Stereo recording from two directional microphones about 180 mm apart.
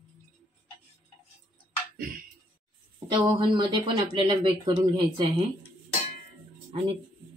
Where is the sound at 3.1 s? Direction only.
25° right (ahead or behind).